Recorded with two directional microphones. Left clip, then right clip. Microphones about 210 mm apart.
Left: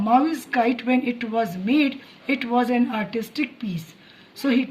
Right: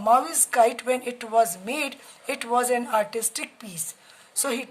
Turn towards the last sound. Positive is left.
turn(degrees=-50)  # may be behind; listen again after turning